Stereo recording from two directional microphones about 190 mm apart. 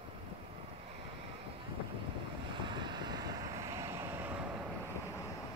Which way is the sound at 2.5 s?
25° right (ahead or behind).